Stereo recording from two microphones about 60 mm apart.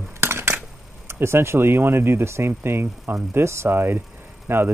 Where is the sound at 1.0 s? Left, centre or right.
Right.